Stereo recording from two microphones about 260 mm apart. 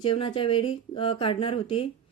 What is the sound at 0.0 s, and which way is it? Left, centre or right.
Speech, centre.